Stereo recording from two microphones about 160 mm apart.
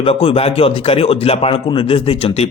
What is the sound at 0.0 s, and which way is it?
Speech, 35° left (ahead or behind).